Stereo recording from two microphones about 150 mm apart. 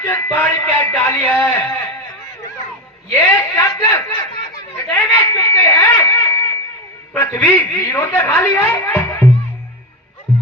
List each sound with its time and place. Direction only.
0.0 s a man's voice: 15° left (ahead or behind)
3.1 s a sound: 15° left (ahead or behind)
7.1 s a man's voice: 15° left (ahead or behind)